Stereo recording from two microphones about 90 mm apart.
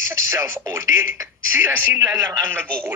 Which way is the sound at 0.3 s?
30° right (ahead or behind).